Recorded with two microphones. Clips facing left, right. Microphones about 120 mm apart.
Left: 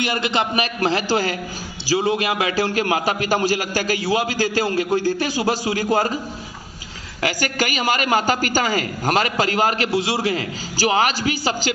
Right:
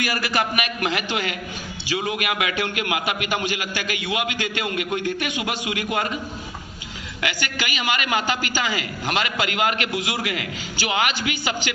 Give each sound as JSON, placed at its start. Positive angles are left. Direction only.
{"t": 0.0, "sound": "a man's voice", "side_deg": 25}
{"t": 7.2, "sound": "a man's voice", "side_deg": 40}